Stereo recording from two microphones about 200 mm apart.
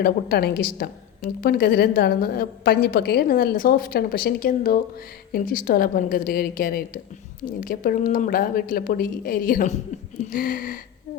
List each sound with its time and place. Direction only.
0.0 s a woman's voice: 50° left (ahead or behind)